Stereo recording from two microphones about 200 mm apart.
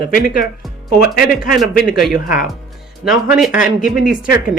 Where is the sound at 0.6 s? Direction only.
Centre (ahead or behind).